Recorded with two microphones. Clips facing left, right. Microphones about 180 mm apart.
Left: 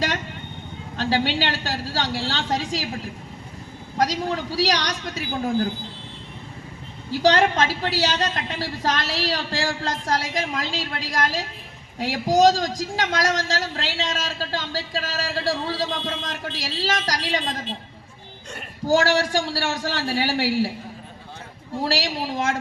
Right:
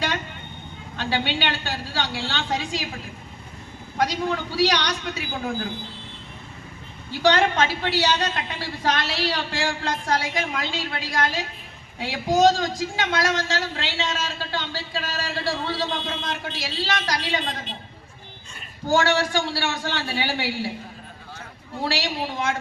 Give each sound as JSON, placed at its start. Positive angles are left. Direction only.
{"t": 0.9, "sound": "a man's voice", "side_deg": 35}
{"t": 3.9, "sound": "a man's voice", "side_deg": 35}
{"t": 7.1, "sound": "a man's voice", "side_deg": 40}
{"t": 18.9, "sound": "a man's voice", "side_deg": 40}
{"t": 21.8, "sound": "a man's voice", "side_deg": 40}